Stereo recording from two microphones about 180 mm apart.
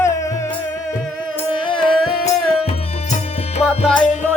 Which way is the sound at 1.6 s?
30° left (ahead or behind).